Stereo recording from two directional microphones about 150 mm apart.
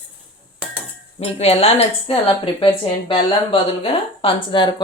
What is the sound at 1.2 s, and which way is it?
Speech, 40° left (ahead or behind).